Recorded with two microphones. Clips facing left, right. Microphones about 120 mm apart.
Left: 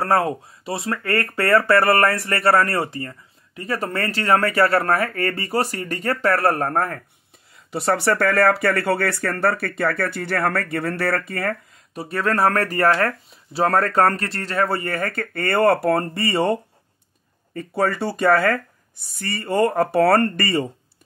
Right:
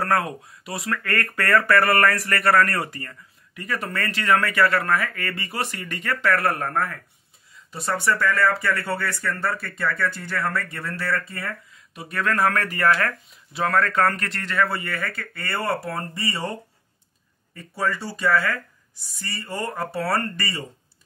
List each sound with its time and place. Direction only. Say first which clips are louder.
0.0 s speech: left 4 dB; 30° left (ahead or behind)
7.5 s speech: left 6 dB; 70° left (ahead or behind)
11.9 s speech: left 3 dB; 35° left (ahead or behind); by 16.5 s 60° left (ahead or behind)
17.6 s speech: left 5 dB; 55° left (ahead or behind)